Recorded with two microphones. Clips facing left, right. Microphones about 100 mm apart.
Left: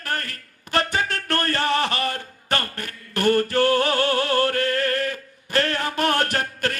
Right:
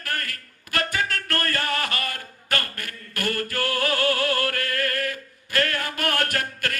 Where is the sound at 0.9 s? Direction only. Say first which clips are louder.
Left 3 dB; 25° left (ahead or behind).